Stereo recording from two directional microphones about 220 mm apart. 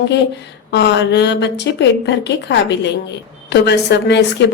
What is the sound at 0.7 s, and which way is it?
A woman's voice, 55° left (ahead or behind).